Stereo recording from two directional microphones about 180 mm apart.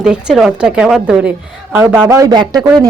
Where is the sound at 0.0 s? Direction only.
5° right (ahead or behind).